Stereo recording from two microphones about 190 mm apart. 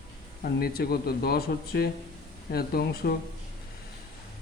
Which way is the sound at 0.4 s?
50° left (ahead or behind).